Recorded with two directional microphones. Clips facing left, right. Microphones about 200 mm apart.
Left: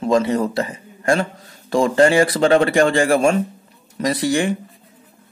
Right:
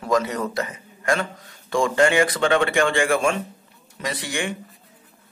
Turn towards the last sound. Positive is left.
turn(degrees=35)  # may be behind; listen again after turning